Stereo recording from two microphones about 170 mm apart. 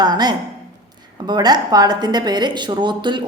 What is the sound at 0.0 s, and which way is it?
A woman's voice, 25° right (ahead or behind).